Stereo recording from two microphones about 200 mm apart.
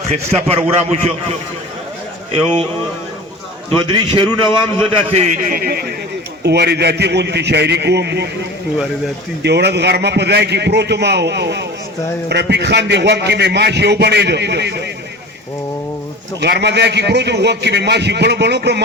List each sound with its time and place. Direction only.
0.1 s a man's voice: 30° right (ahead or behind)
3.8 s a man's voice: 25° right (ahead or behind); by 8.3 s 55° right (ahead or behind)
9.4 s a man's voice: 55° right (ahead or behind)
16.4 s a man's voice: 55° right (ahead or behind)